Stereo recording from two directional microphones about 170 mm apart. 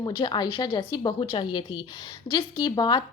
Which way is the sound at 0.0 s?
25° left (ahead or behind).